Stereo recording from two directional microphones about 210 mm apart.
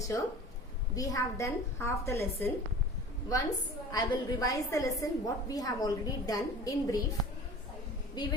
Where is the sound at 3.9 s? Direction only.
15° left (ahead or behind).